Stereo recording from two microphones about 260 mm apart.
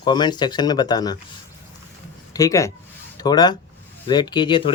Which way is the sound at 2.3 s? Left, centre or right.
Centre.